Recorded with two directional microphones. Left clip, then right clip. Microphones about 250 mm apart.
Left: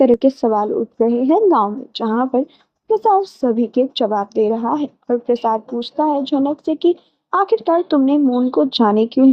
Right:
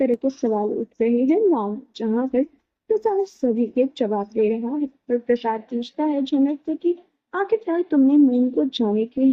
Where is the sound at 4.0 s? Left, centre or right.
Left.